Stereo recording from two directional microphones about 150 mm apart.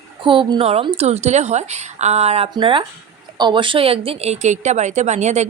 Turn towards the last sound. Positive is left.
turn(degrees=-50)  # may be behind; listen again after turning